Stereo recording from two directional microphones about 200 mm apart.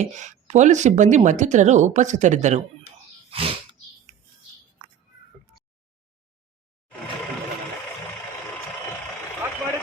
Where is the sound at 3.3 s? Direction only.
30° right (ahead or behind).